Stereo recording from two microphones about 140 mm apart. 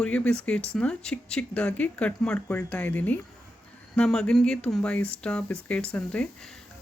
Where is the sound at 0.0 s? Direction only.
5° left (ahead or behind).